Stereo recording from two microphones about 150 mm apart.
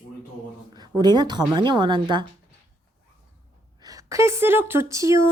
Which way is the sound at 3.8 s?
25° right (ahead or behind).